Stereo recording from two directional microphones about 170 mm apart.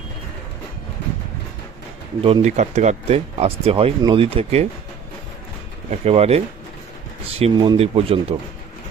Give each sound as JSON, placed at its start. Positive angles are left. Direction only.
{"t": 2.4, "sound": "speech", "side_deg": -45}
{"t": 5.9, "sound": "speech", "side_deg": -40}